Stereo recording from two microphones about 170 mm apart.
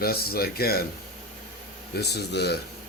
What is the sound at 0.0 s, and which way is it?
Speech, 65° left (ahead or behind).